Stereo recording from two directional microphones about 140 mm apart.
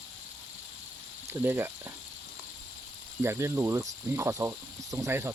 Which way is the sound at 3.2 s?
20° right (ahead or behind).